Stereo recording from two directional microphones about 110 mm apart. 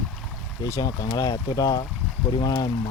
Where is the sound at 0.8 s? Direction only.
35° left (ahead or behind).